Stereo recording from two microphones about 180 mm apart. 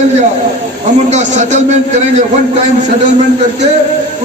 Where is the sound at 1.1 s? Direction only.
40° right (ahead or behind).